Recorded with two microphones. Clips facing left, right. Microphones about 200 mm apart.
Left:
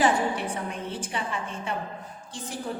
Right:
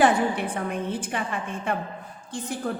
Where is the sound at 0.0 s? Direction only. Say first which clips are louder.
Right 3 dB; 55° right (ahead or behind).